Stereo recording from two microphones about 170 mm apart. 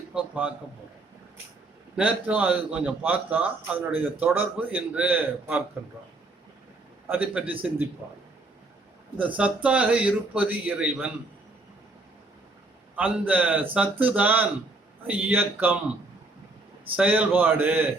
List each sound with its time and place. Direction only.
0.1 s a sound: 10° right (ahead or behind)
2.0 s a man's voice: 10° right (ahead or behind)
7.1 s a man's voice: 10° right (ahead or behind)
13.0 s a man's voice: 10° right (ahead or behind)
17.0 s a man's voice: 10° right (ahead or behind)